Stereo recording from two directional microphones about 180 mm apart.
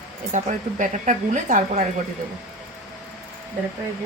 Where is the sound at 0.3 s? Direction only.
40° right (ahead or behind).